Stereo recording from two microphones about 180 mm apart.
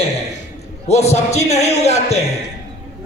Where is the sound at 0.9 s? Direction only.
35° left (ahead or behind).